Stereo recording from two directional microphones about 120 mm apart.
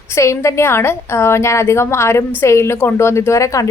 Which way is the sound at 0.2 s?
25° left (ahead or behind).